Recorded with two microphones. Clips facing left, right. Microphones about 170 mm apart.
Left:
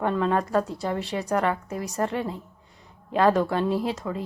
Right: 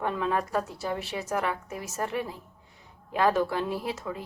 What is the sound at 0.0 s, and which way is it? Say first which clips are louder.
Speech: left 4 dB; 5° right (ahead or behind).